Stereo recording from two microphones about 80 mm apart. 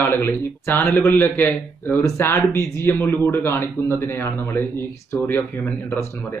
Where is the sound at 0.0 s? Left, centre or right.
Left.